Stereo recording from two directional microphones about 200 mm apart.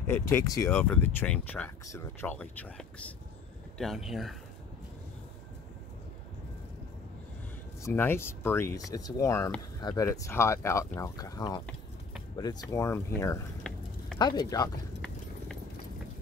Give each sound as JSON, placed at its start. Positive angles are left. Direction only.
{"t": 0.0, "sound": "speech", "side_deg": 10}
{"t": 7.8, "sound": "speech", "side_deg": 10}
{"t": 13.7, "sound": "a sound", "side_deg": 5}
{"t": 14.1, "sound": "speech", "side_deg": 20}